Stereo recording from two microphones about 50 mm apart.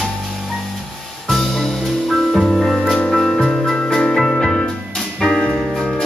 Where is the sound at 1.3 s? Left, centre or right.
Centre.